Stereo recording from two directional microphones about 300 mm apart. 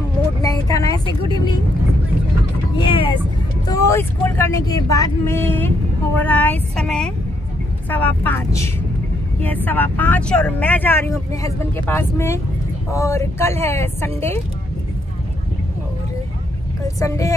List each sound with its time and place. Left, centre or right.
0.4 s vehicle: centre
2.8 s speech: centre
9.7 s speech: centre
16.8 s speech: centre